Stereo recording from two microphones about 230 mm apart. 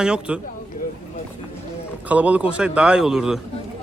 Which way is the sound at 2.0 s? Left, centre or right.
Centre.